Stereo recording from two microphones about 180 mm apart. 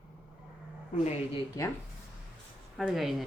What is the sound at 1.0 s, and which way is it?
Speech, 35° left (ahead or behind).